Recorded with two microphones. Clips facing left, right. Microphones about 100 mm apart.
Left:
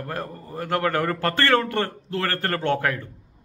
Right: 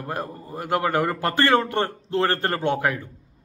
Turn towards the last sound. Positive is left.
turn(degrees=-15)  # may be behind; listen again after turning